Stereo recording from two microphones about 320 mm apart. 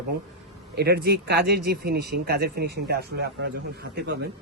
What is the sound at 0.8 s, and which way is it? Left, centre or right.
Speech, right.